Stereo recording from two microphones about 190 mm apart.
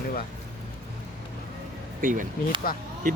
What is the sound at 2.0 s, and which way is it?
Speech, 45° right (ahead or behind).